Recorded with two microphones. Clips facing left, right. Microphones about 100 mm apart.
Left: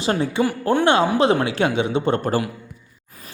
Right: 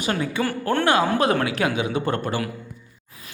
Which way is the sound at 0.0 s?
30° left (ahead or behind).